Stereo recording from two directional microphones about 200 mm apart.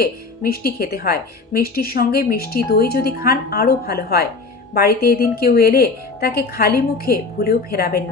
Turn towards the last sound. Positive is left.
turn(degrees=50)  # may be behind; listen again after turning